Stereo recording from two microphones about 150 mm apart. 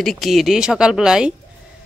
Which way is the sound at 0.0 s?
Centre (ahead or behind).